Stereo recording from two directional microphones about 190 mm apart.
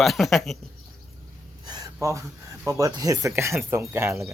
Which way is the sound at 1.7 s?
15° right (ahead or behind).